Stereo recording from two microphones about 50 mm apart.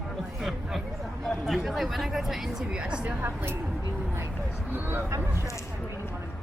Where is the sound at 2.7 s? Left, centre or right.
Right.